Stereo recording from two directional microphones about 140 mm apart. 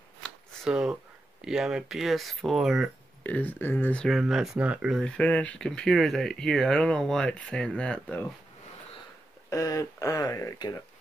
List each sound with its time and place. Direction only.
0.7 s speech: 5° right (ahead or behind)
3.3 s speech: 10° left (ahead or behind); by 5.0 s 5° right (ahead or behind)
5.0 s speech: 10° left (ahead or behind)
9.5 s speech: 25° left (ahead or behind)